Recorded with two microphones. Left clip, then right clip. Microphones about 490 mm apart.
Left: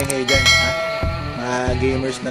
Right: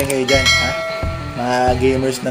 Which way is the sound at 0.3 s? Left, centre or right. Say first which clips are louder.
Even; centre.